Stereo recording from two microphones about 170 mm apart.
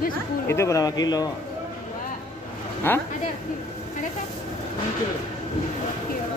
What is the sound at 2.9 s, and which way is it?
Speech, 10° left (ahead or behind).